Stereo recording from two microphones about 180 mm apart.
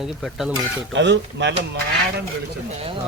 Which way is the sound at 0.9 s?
80° right.